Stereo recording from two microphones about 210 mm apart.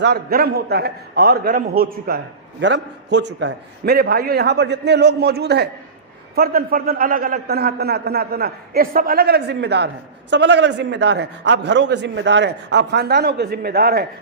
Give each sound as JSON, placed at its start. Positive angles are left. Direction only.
{"t": 0.0, "sound": "a man's voice", "side_deg": -50}